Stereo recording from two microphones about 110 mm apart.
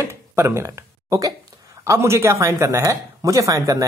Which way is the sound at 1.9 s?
25° right (ahead or behind).